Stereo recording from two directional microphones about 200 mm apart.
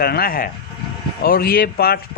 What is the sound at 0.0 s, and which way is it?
A man's voice, 50° left (ahead or behind).